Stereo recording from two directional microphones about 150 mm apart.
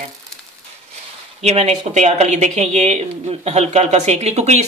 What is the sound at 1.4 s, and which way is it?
Speech, 45° right (ahead or behind).